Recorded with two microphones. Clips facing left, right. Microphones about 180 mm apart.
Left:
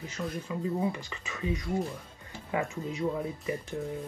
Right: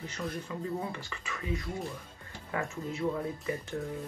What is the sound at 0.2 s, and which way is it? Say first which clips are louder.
Speech: left 2 dB; 5° left (ahead or behind).